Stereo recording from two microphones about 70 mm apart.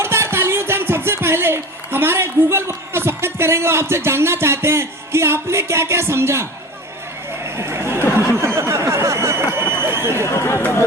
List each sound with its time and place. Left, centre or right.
0.0 s speech: right
7.5 s chatter: right
8.5 s a sound: right
10.2 s speech: left
10.6 s speech: left